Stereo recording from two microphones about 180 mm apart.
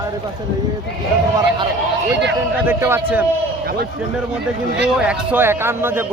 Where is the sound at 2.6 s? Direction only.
10° right (ahead or behind).